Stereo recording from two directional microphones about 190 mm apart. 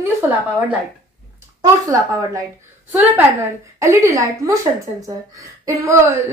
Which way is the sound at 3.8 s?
15° right (ahead or behind).